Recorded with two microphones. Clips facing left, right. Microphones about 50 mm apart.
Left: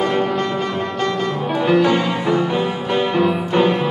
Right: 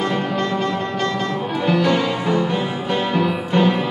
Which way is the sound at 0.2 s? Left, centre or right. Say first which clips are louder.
Left 2 dB; centre.